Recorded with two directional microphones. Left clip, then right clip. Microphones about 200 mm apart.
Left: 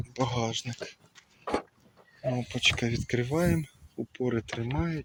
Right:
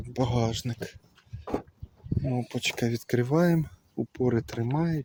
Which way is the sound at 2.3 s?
25° right (ahead or behind).